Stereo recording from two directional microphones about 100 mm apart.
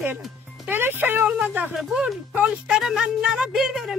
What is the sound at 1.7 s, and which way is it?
Speech, 5° right (ahead or behind).